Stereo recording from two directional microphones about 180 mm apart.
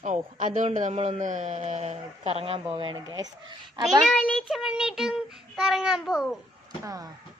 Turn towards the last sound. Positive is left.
turn(degrees=-20)  # may be behind; listen again after turning